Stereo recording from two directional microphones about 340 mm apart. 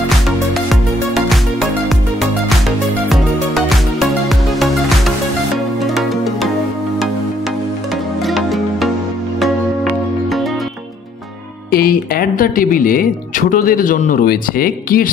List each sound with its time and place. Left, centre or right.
1.1 s music: centre
3.1 s music: centre
8.3 s music: centre
11.7 s speech: left